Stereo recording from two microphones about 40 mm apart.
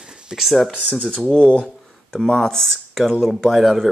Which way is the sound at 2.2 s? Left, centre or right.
Centre.